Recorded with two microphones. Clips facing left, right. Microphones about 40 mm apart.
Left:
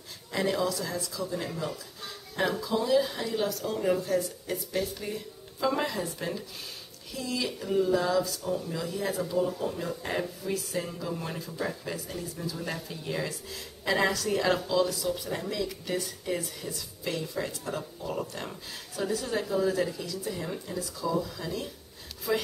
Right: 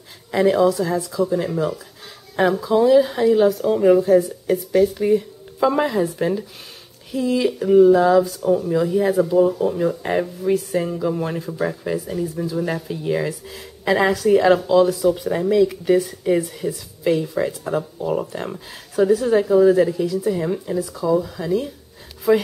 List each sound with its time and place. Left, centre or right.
0.3 s speech: right